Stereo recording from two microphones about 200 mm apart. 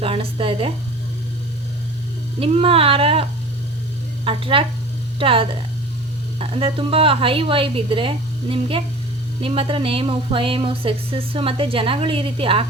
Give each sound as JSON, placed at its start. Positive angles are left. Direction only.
{"t": 0.0, "sound": "speech", "side_deg": -30}
{"t": 2.4, "sound": "speech", "side_deg": -30}
{"t": 4.3, "sound": "speech", "side_deg": -25}